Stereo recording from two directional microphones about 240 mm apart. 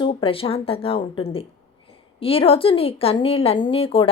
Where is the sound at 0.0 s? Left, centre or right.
Left.